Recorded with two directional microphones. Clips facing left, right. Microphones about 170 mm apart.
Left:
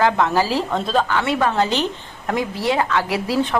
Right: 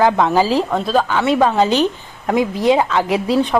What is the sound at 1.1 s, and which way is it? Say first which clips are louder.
A woman's voice: right 5 dB; 15° right (ahead or behind).